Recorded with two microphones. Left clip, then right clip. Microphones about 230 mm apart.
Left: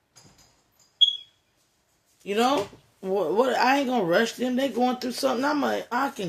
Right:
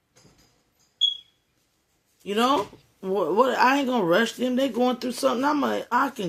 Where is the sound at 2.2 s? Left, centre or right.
Right.